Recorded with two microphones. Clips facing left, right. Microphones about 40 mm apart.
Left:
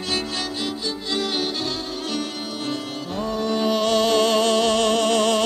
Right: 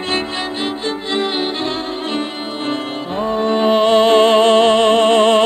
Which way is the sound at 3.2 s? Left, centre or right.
Right.